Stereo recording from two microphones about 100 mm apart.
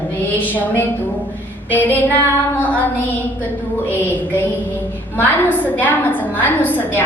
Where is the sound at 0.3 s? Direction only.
20° left (ahead or behind).